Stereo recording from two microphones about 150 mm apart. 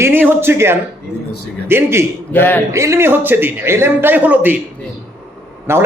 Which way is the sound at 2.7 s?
20° right (ahead or behind).